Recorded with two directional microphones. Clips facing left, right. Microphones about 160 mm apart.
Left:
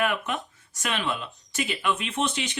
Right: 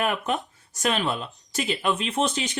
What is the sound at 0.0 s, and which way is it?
Speech, 35° right (ahead or behind).